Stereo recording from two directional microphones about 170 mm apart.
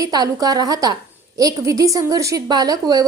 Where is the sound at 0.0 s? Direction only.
20° right (ahead or behind).